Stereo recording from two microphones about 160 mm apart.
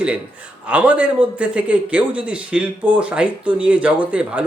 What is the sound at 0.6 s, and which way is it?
A man's voice, 10° right (ahead or behind).